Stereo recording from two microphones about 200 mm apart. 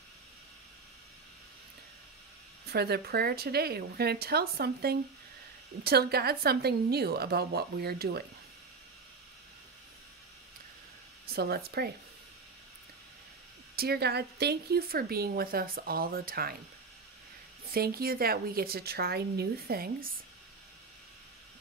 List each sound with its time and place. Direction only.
2.6 s speech: 50° right (ahead or behind)
11.3 s speech: 50° right (ahead or behind)
13.7 s speech: 55° right (ahead or behind)
17.6 s speech: 50° right (ahead or behind)